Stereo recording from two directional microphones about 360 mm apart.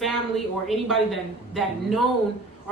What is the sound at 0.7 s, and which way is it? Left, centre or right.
Speech, centre.